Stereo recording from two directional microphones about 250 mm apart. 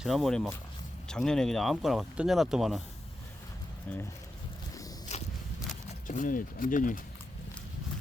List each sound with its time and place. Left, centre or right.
0.0 s speech: centre
3.9 s speech: centre
5.1 s walk: left
6.1 s speech: left